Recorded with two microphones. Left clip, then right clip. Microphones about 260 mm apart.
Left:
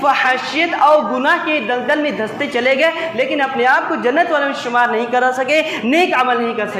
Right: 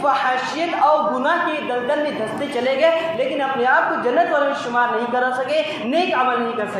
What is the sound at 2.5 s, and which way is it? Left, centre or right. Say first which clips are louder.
A man's voice: left 2 dB; left.